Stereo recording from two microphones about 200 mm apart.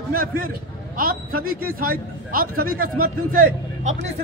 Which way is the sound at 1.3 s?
90° right.